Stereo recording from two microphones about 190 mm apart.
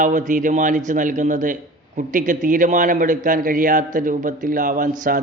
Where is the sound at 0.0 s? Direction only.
40° right (ahead or behind).